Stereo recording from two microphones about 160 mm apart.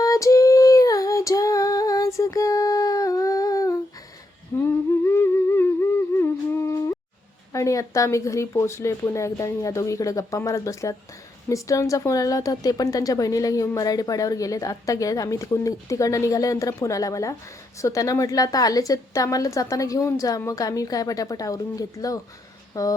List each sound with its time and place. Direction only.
0.0 s female singing: 20° left (ahead or behind)
4.5 s humming: 15° left (ahead or behind)
7.5 s a woman's voice: 20° left (ahead or behind)